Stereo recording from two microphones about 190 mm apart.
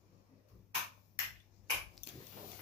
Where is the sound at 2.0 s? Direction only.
25° left (ahead or behind).